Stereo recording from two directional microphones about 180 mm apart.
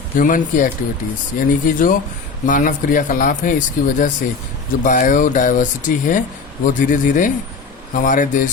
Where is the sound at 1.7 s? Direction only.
50° left (ahead or behind).